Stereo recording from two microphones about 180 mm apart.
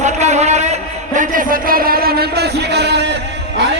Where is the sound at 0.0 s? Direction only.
40° right (ahead or behind).